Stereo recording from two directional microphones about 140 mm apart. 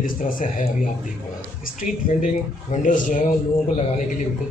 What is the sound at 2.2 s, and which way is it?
Speech, 70° left (ahead or behind).